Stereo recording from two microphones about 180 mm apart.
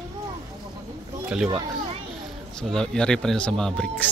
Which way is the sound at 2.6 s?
5° left (ahead or behind).